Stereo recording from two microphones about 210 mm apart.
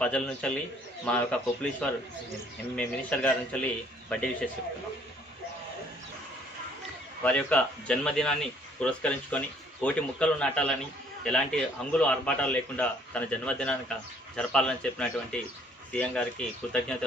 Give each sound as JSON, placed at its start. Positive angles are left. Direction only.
{"t": 0.0, "sound": "a man's voice", "side_deg": 5}
{"t": 7.2, "sound": "a man's voice", "side_deg": 5}